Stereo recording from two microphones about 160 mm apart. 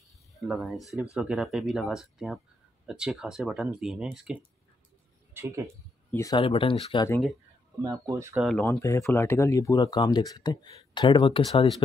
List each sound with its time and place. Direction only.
0.4 s a man's voice: centre (ahead or behind)
6.3 s speech: 35° left (ahead or behind)
7.8 s speech: 20° right (ahead or behind)
8.5 s speech: 10° left (ahead or behind); by 11.6 s 30° left (ahead or behind)